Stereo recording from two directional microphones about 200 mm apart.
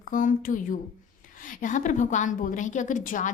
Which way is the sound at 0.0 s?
40° left (ahead or behind).